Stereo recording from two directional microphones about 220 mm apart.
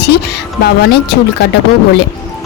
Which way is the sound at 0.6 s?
50° left (ahead or behind).